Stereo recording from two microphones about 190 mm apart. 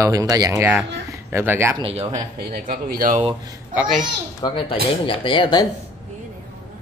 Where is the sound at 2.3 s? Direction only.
50° right (ahead or behind).